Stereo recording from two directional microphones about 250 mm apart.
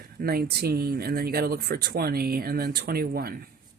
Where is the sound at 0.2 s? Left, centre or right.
Right.